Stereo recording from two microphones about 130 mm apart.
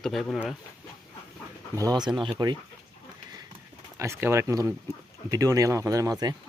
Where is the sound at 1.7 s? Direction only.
30° right (ahead or behind).